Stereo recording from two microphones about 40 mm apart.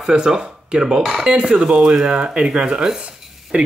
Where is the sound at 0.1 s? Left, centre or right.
Right.